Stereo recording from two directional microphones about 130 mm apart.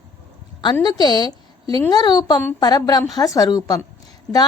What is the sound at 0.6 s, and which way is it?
A woman's voice, 35° left (ahead or behind).